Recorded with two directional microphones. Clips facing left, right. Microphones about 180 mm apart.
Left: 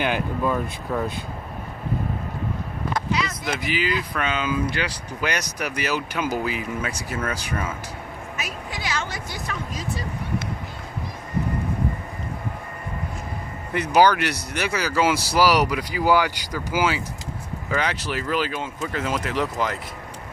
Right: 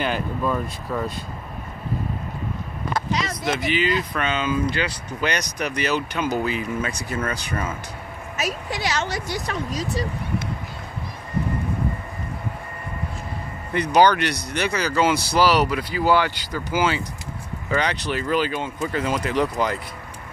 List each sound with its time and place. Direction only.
0.0 s speech: 10° left (ahead or behind)
3.1 s a sound: 40° right (ahead or behind)
3.5 s speech: 5° left (ahead or behind)
8.4 s a woman's voice: 40° right (ahead or behind)
13.7 s speech: 5° left (ahead or behind)